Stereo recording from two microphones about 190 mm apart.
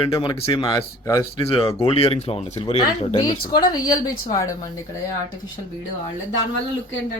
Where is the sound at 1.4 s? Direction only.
30° left (ahead or behind).